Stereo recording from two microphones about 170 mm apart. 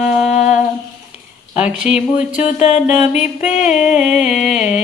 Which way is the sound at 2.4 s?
45° left (ahead or behind).